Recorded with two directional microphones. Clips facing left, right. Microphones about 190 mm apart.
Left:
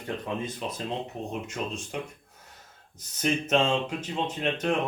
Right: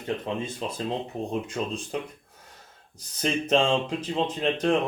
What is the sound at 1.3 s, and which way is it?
Speech, 30° right (ahead or behind).